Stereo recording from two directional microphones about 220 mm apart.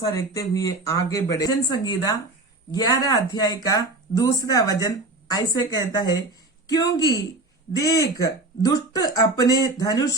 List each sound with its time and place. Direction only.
0.0 s speech: 15° left (ahead or behind)